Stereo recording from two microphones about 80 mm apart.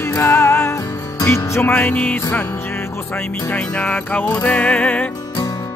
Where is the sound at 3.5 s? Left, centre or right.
Centre.